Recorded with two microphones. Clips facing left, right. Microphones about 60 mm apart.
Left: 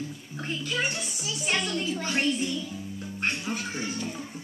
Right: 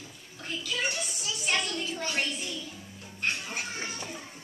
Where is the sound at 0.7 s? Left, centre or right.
Left.